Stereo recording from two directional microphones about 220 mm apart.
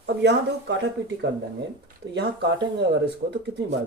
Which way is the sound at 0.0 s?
50° right (ahead or behind).